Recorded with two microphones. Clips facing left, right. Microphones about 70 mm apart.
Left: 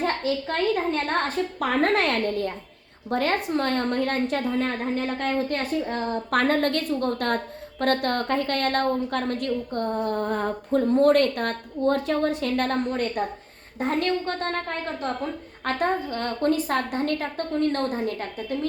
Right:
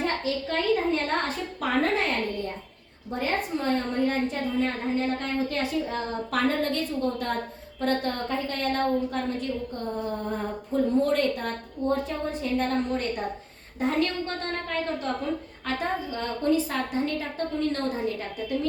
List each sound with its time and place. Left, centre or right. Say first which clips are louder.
0.0 s a sound: left 2 dB; left
1.5 s a woman's voice: left 2 dB; left
3.1 s a woman's voice: left 4 dB; left
12.9 s a woman's voice: left 2 dB; left
15.6 s a woman's voice: left 5 dB; left